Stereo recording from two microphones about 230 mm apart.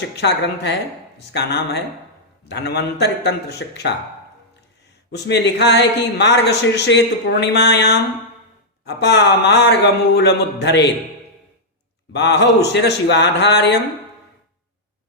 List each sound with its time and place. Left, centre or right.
0.2 s speech: left
5.3 s speech: left
12.1 s speech: left